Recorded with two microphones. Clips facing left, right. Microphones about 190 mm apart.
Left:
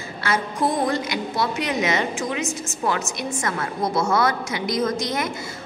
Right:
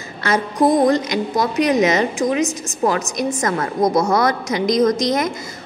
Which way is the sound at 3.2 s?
40° right (ahead or behind).